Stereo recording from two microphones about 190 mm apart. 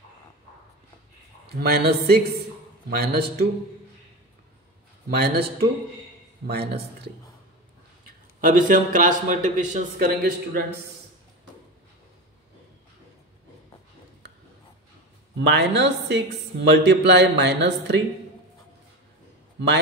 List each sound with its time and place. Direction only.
1.6 s speech: 60° right (ahead or behind)
5.1 s speech: 55° right (ahead or behind)
8.4 s speech: 45° right (ahead or behind)
15.3 s speech: 65° right (ahead or behind)